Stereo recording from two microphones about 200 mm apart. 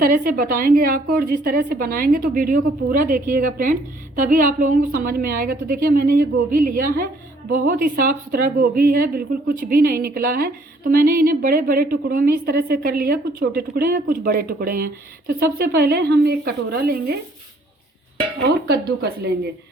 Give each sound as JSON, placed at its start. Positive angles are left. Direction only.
{"t": 0.0, "sound": "a woman's voice", "side_deg": -45}